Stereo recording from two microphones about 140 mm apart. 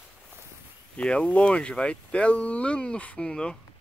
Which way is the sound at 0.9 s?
10° left (ahead or behind).